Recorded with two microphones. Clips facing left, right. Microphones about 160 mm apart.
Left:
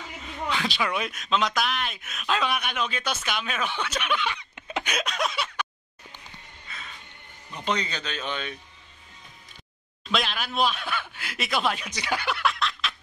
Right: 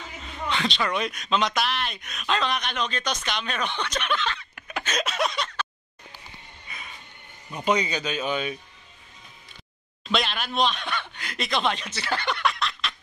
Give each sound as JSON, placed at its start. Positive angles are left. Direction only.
{"t": 0.5, "sound": "speech", "side_deg": 5}
{"t": 5.0, "sound": "a sound", "side_deg": 0}
{"t": 6.7, "sound": "music", "side_deg": -15}
{"t": 7.5, "sound": "speech", "side_deg": -10}
{"t": 10.0, "sound": "speech", "side_deg": 0}